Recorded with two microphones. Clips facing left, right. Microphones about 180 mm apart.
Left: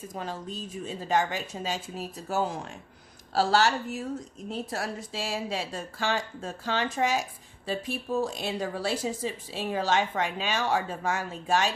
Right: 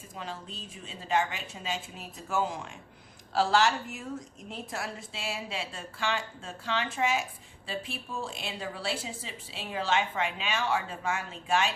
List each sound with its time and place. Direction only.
0.1 s speech: 45° left (ahead or behind)